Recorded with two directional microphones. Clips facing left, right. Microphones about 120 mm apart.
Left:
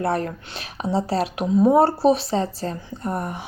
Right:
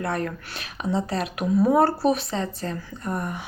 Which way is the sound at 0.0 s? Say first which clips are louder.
Left 4 dB; 30° left (ahead or behind).